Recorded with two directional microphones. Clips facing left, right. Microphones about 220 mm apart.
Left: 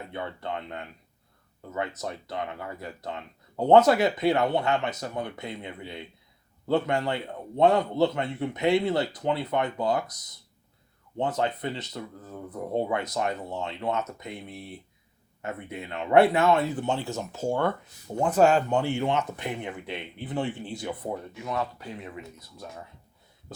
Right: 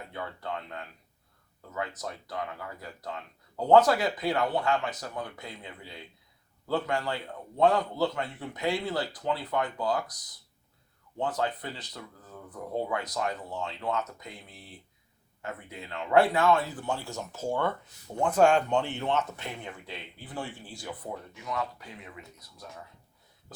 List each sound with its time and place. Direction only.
0.1 s speech: 25° left (ahead or behind)
11.2 s speech: 20° left (ahead or behind)
15.4 s speech: 20° left (ahead or behind)